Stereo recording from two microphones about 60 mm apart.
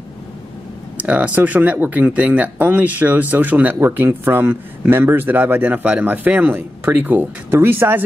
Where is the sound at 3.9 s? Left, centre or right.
Right.